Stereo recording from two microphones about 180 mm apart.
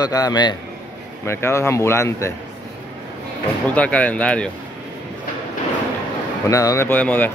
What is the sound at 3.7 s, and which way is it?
Speech, 5° left (ahead or behind).